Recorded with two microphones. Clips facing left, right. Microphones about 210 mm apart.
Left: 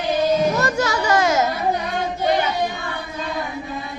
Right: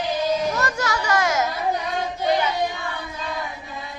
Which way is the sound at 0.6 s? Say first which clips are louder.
Left 4 dB; 25° left (ahead or behind).